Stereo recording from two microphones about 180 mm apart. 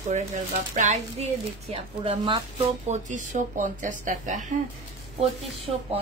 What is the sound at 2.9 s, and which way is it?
Speech, 45° right (ahead or behind).